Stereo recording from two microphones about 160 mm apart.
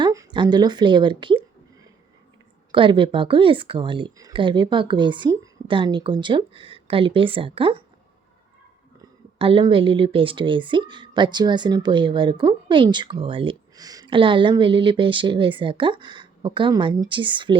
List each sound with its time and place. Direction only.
0.0 s speech: 25° right (ahead or behind)
9.4 s speech: 35° right (ahead or behind)